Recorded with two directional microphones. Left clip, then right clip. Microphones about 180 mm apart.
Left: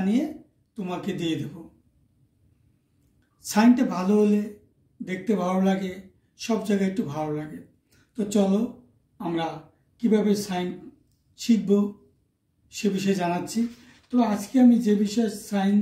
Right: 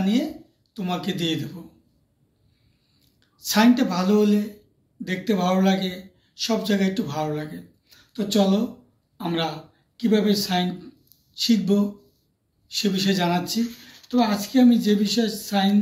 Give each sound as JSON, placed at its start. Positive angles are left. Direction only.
{"t": 0.0, "sound": "speech", "side_deg": 20}
{"t": 3.3, "sound": "a man's voice", "side_deg": 20}